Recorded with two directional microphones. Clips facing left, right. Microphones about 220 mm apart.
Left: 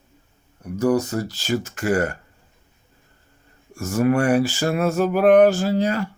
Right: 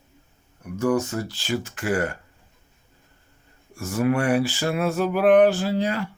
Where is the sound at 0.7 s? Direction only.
35° left (ahead or behind).